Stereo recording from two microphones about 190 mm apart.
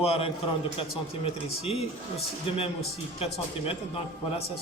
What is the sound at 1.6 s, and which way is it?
A man's voice, 30° left (ahead or behind).